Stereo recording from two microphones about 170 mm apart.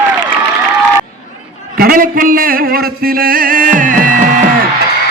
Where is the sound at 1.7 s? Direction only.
60° right (ahead or behind).